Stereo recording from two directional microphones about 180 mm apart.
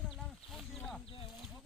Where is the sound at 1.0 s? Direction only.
30° left (ahead or behind).